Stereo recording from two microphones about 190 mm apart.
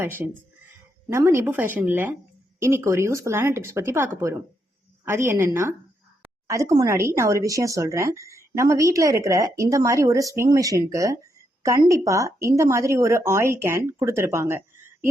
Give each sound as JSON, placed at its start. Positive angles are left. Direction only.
{"t": 0.0, "sound": "a woman's voice", "side_deg": -10}